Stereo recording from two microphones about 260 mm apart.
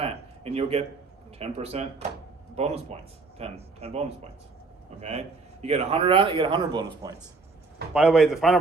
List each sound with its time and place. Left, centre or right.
0.0 s a sound: right
1.4 s speech: right
7.9 s a man's voice: centre